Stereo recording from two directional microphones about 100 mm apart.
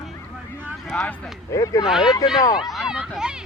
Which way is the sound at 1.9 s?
5° right (ahead or behind).